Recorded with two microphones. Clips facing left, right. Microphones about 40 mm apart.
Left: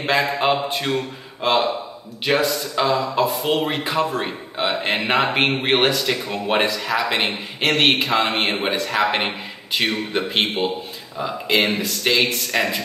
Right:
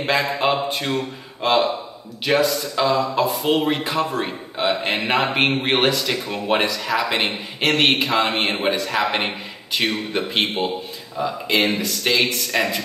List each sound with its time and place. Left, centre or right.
0.0 s speech: centre